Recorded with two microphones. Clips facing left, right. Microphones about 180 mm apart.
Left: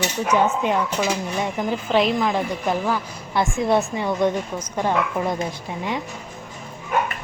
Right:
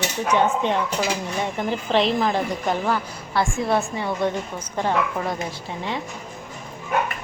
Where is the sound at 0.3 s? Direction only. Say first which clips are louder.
Left 1 dB; 10° left (ahead or behind).